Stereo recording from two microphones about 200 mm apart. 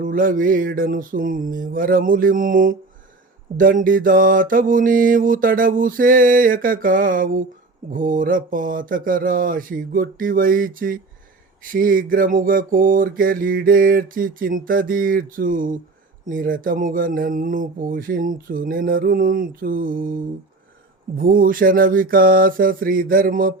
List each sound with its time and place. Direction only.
0.0 s mantra: 45° right (ahead or behind)